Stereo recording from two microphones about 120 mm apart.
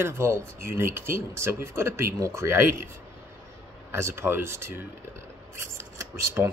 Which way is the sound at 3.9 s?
20° right (ahead or behind).